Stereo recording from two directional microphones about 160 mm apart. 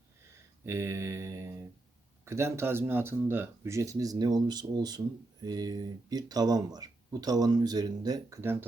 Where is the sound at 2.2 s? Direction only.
15° right (ahead or behind).